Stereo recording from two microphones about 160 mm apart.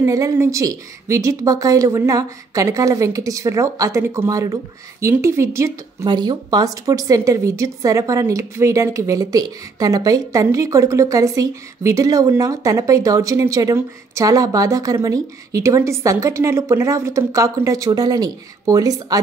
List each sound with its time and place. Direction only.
0.0 s speech: 20° right (ahead or behind)